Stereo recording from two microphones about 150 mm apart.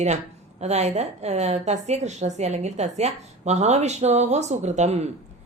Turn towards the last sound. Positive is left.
turn(degrees=-45)  # may be behind; listen again after turning